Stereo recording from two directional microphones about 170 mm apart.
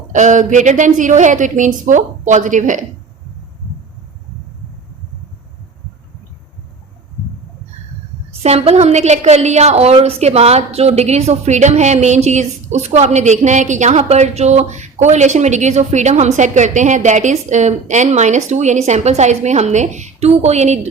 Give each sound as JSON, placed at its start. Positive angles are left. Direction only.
{"t": 0.1, "sound": "a woman's voice", "side_deg": -45}
{"t": 8.4, "sound": "a woman's voice", "side_deg": -40}